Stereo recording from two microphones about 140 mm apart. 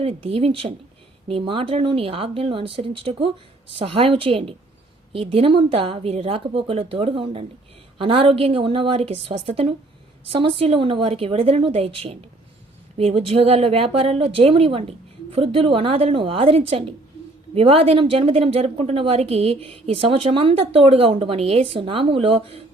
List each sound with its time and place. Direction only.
0.0 s a woman's voice: 45° right (ahead or behind)